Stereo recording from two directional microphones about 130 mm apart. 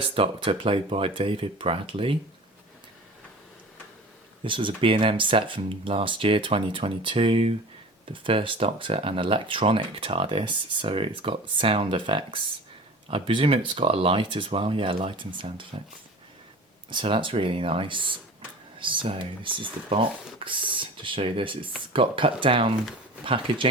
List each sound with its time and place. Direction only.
0.0 s speech: 45° right (ahead or behind)
4.4 s speech: 40° right (ahead or behind)
16.9 s speech: 40° right (ahead or behind)